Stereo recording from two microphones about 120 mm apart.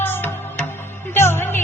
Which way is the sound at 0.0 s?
20° left (ahead or behind).